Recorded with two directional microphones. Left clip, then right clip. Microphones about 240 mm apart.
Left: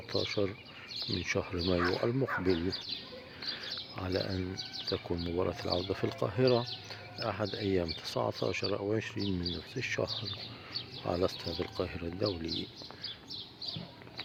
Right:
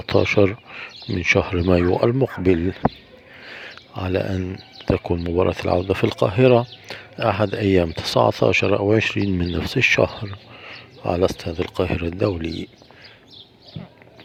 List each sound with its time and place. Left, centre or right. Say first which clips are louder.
0.0 s speech: right 16 dB; right
3.5 s bird: right 6 dB; right
4.9 s speech: right 15 dB; right